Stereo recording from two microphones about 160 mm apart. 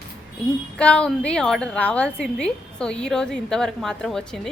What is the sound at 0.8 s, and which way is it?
A woman's voice, 5° left (ahead or behind).